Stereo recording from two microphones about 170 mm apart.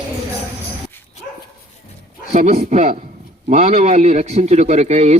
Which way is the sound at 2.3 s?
40° right (ahead or behind).